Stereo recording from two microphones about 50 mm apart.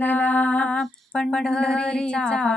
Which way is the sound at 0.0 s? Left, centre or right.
Left.